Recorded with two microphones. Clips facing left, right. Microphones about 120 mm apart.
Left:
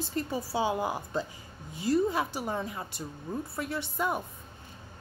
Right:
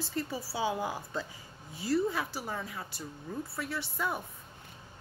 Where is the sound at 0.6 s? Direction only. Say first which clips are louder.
Left 3 dB; 15° left (ahead or behind).